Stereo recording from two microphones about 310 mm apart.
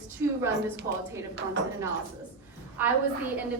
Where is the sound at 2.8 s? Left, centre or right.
Centre.